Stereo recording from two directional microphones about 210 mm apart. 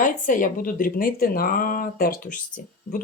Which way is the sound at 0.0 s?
40° left (ahead or behind).